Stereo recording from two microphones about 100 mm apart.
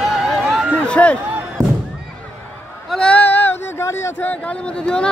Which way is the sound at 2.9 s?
10° left (ahead or behind).